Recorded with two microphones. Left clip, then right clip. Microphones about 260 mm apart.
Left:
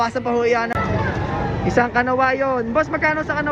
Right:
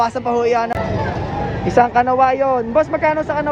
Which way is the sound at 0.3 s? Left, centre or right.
Centre.